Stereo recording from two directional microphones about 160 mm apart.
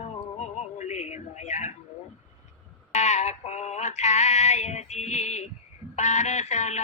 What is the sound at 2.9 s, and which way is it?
Synthetic singing, 45° left (ahead or behind).